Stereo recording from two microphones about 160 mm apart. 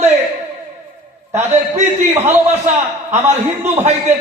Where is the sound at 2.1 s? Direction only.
15° right (ahead or behind).